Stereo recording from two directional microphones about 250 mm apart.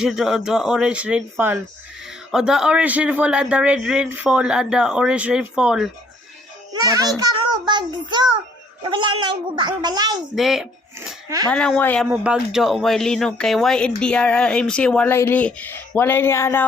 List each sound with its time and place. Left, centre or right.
0.0 s speech: centre
6.7 s a child's voice: centre
10.3 s speech: centre
12.0 s speech: centre